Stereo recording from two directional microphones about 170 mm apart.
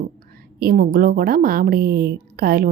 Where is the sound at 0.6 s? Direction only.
65° right (ahead or behind).